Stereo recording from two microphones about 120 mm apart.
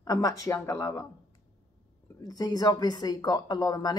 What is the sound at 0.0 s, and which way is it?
Speech, 30° left (ahead or behind).